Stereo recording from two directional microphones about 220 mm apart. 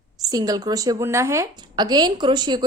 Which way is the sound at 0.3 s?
15° right (ahead or behind).